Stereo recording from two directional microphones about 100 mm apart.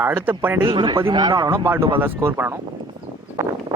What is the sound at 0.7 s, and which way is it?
Speech, 50° right (ahead or behind).